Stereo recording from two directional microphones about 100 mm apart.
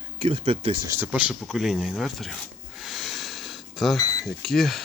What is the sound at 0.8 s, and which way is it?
Speech, 20° right (ahead or behind).